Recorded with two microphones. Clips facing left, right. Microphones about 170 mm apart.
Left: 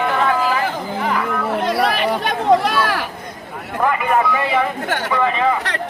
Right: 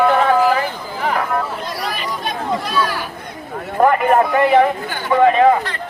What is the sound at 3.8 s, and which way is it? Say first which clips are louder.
Speech: right 4 dB; 45° right (ahead or behind).